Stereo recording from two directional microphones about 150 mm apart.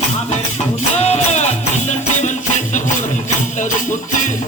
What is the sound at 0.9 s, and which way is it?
Music, 45° left (ahead or behind).